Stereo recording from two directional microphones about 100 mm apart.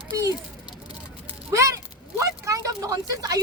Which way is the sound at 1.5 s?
30° right (ahead or behind).